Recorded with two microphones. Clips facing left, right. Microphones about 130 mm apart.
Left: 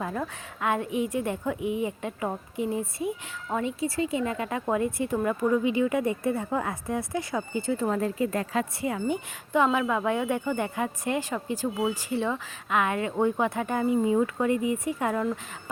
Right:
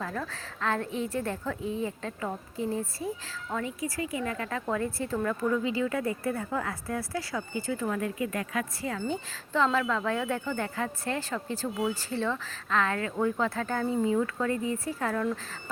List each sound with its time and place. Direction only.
0.0 s a woman's voice: 20° left (ahead or behind)